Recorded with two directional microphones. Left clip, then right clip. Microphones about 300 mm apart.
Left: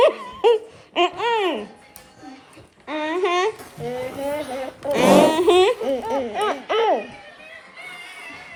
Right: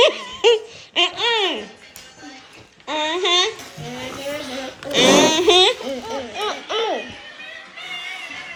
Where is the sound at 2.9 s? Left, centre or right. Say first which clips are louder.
Right 3 dB; centre.